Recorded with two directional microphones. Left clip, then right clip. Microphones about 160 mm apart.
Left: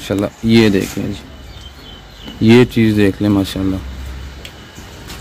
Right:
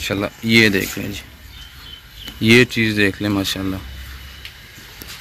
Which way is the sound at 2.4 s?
10° left (ahead or behind).